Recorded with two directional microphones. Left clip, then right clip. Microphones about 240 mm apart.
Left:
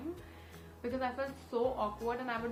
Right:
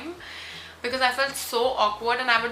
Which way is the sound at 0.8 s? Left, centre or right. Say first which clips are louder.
Right 13 dB; centre.